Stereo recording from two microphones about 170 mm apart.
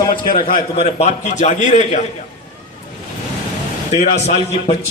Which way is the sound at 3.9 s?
40° left (ahead or behind).